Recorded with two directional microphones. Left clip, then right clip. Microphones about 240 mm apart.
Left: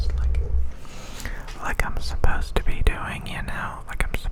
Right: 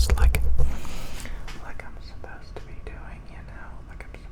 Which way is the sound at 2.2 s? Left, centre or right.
Left.